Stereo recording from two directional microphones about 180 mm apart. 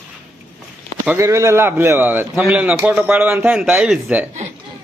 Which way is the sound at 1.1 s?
15° right (ahead or behind).